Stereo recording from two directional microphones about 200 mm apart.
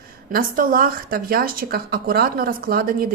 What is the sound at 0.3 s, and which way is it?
Speech, 45° right (ahead or behind).